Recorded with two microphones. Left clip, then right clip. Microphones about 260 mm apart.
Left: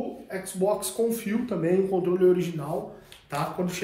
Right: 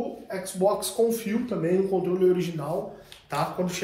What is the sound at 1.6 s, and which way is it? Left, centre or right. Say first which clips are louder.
Speech: even; left.